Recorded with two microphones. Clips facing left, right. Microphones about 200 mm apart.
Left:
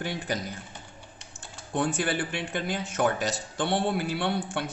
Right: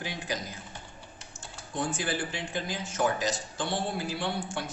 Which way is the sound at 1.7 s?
60° left (ahead or behind).